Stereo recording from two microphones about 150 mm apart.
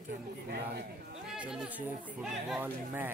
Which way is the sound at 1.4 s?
5° right (ahead or behind).